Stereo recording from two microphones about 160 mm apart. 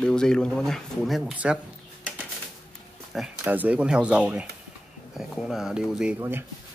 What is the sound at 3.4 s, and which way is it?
Speech, 10° right (ahead or behind).